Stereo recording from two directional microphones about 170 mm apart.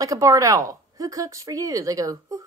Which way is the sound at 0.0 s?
20° right (ahead or behind).